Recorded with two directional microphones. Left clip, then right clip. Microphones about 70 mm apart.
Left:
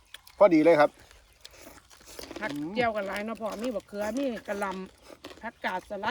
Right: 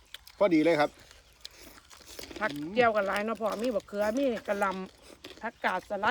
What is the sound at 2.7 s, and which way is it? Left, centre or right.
Speech, right.